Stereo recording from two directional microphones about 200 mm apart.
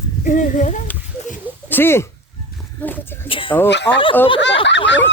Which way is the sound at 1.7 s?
10° left (ahead or behind).